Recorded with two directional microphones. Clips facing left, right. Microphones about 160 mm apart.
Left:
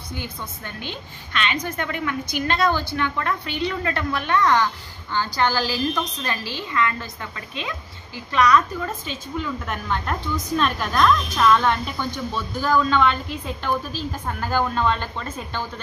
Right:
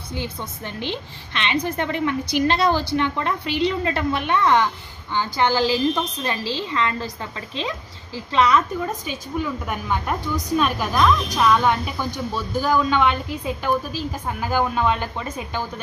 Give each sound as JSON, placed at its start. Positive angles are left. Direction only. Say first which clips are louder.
{"t": 0.1, "sound": "a woman's voice", "louder": "right 3 dB", "side_deg": -25}
{"t": 8.8, "sound": "speech", "louder": "right 2 dB", "side_deg": -15}